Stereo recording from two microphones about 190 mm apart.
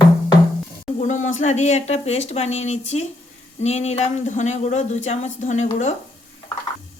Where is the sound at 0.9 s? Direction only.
40° left (ahead or behind).